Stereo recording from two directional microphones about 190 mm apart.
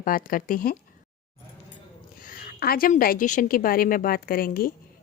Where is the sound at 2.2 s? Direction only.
50° left (ahead or behind).